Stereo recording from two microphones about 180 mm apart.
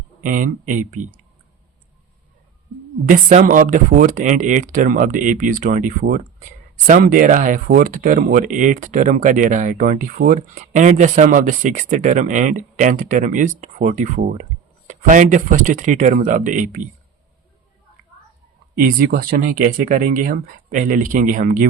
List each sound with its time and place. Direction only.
0.2 s speech: 50° right (ahead or behind)
3.1 s speech: 45° right (ahead or behind)
18.8 s speech: 55° right (ahead or behind)